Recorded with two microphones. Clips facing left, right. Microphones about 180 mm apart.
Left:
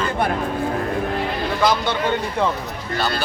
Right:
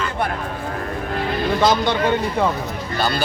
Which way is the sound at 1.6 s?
20° right (ahead or behind).